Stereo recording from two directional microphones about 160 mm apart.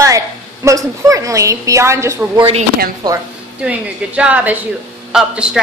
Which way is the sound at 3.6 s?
10° right (ahead or behind).